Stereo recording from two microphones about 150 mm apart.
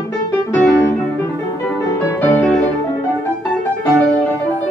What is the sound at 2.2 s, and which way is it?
Music, 10° left (ahead or behind).